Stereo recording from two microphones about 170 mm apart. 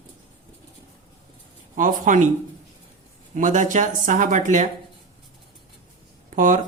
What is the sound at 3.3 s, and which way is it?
Speech, 45° right (ahead or behind).